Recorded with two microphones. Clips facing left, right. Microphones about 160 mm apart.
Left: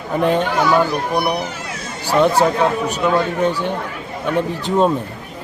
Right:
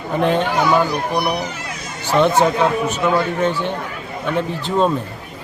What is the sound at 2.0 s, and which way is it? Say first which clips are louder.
A man's voice: even; 10° left (ahead or behind).